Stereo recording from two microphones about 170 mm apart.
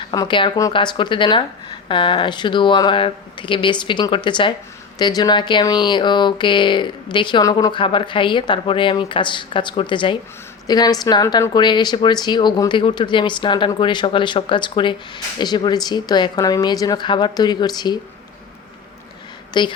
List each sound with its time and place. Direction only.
0.1 s a woman's voice: 25° left (ahead or behind)
19.6 s a woman's voice: 25° left (ahead or behind)